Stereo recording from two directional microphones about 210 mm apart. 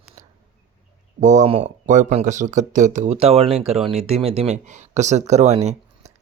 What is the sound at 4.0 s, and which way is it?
A man's voice, 30° right (ahead or behind).